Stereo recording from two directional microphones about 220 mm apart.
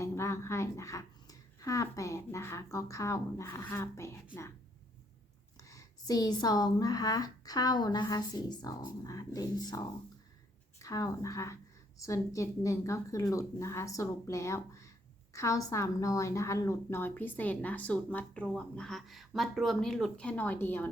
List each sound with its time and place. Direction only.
0.0 s speech: 10° left (ahead or behind)
5.6 s a woman's voice: 15° left (ahead or behind)